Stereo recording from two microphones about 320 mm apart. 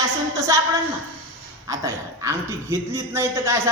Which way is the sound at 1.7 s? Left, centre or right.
Centre.